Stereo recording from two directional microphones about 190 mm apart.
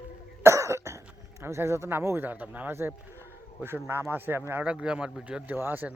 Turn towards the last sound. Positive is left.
turn(degrees=-10)  # may be behind; listen again after turning